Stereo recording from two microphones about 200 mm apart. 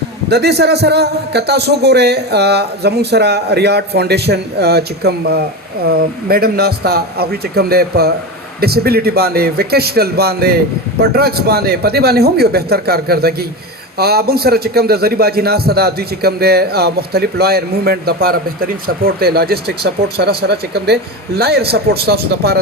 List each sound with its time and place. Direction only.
0.3 s a man's voice: 55° right (ahead or behind)